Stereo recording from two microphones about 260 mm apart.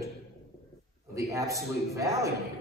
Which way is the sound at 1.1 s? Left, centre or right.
Centre.